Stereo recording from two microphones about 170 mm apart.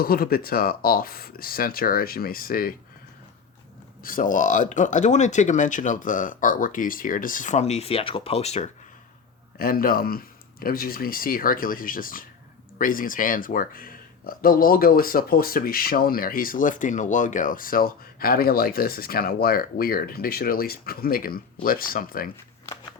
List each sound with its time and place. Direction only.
0.0 s speech: 60° left (ahead or behind)
4.0 s speech: 55° left (ahead or behind)
9.6 s speech: 55° left (ahead or behind)
22.6 s a sound: 20° left (ahead or behind)